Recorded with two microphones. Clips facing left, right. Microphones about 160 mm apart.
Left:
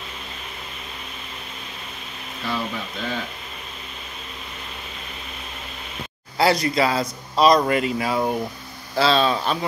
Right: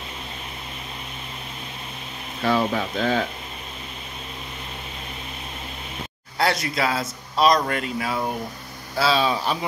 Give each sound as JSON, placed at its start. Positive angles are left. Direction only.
{"t": 2.4, "sound": "speech", "side_deg": -60}
{"t": 6.3, "sound": "speech", "side_deg": 0}